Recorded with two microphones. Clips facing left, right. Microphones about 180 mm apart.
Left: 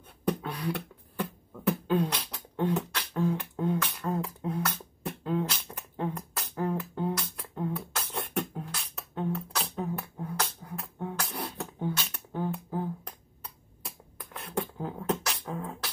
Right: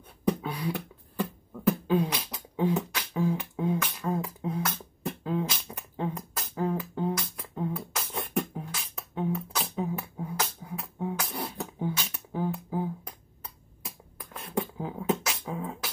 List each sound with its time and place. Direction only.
0.4 s beatboxing: 5° right (ahead or behind)
1.9 s beatboxing: 5° right (ahead or behind)